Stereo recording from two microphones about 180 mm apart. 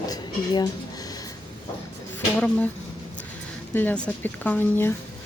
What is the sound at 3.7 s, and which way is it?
Speech, 10° left (ahead or behind).